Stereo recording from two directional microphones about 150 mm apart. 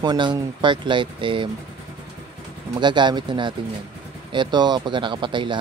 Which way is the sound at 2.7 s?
30° right (ahead or behind).